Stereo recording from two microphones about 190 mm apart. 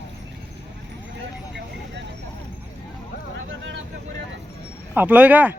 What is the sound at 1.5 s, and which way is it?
Vehicle, 70° right (ahead or behind).